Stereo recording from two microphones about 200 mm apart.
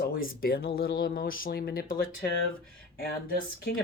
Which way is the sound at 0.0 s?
45° left (ahead or behind).